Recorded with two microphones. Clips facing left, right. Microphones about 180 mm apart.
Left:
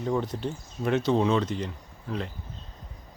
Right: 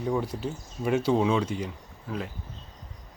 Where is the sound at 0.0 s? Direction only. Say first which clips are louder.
Even; 10° right (ahead or behind).